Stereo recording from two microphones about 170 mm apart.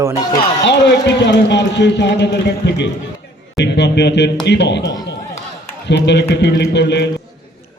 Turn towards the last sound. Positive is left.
turn(degrees=90)